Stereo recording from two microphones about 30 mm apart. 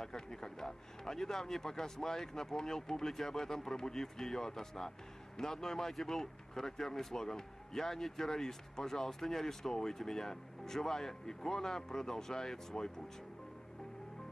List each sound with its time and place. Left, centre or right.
0.0 s speech: centre